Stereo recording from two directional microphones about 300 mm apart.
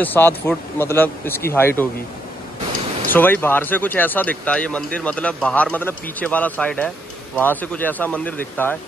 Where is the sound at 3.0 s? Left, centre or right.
Centre.